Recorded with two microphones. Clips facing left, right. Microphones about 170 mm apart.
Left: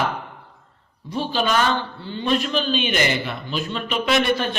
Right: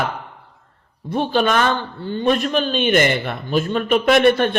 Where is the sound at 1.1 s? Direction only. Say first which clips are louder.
Right 4 dB; 55° right (ahead or behind).